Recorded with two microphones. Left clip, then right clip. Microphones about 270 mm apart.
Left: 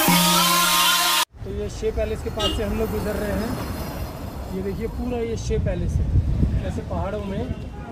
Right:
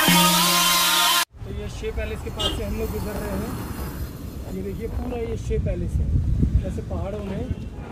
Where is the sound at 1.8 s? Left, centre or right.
Left.